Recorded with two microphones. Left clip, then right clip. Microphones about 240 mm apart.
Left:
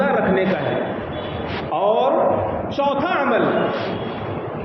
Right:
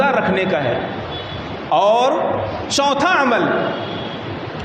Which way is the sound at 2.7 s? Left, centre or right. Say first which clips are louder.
Right 5 dB; right.